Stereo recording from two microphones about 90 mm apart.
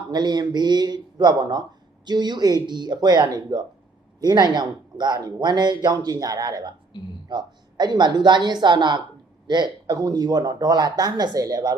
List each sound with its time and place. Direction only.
0.1 s a woman's voice: 50° right (ahead or behind)